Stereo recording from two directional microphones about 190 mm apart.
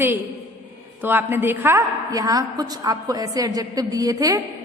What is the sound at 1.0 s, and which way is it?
A woman's voice, 10° right (ahead or behind).